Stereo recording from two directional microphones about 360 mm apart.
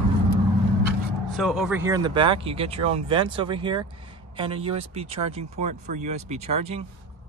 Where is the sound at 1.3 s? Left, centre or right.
Centre.